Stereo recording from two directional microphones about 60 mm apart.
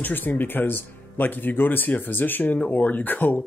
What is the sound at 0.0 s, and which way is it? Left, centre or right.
Speech, left.